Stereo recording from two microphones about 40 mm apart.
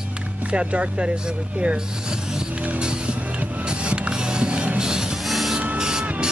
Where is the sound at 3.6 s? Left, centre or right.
Right.